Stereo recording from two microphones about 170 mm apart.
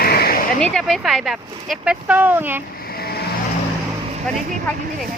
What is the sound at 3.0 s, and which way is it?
Vehicle, 65° left (ahead or behind).